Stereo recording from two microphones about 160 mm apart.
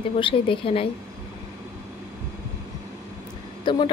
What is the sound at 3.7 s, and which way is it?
Speech, 30° left (ahead or behind).